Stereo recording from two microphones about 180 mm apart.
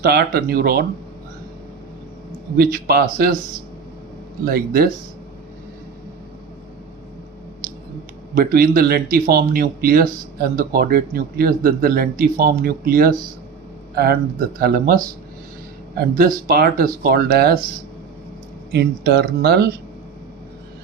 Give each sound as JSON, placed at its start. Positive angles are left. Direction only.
{"t": 0.0, "sound": "speech", "side_deg": -60}
{"t": 2.6, "sound": "speech", "side_deg": -60}
{"t": 4.4, "sound": "speech", "side_deg": -55}
{"t": 8.4, "sound": "speech", "side_deg": -55}
{"t": 18.7, "sound": "speech", "side_deg": -65}